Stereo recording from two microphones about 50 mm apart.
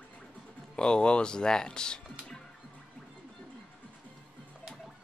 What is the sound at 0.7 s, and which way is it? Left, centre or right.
Speech, centre.